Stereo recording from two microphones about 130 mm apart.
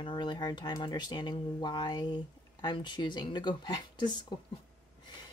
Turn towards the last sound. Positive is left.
turn(degrees=35)  # may be behind; listen again after turning